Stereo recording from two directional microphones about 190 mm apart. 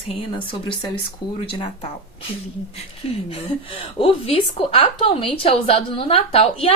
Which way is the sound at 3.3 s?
30° left (ahead or behind).